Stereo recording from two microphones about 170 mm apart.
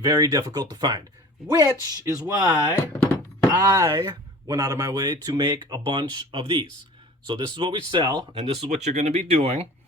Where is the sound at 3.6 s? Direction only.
20° right (ahead or behind).